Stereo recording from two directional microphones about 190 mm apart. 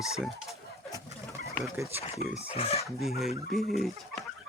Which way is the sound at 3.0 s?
Centre (ahead or behind).